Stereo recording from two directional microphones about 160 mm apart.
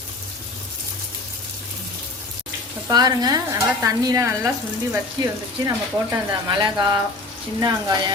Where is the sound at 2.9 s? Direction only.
25° right (ahead or behind).